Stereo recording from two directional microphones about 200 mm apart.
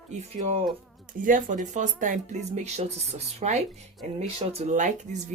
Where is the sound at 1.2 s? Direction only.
40° right (ahead or behind).